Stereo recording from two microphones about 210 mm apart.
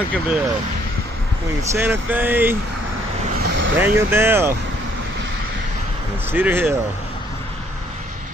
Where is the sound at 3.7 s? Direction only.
10° right (ahead or behind).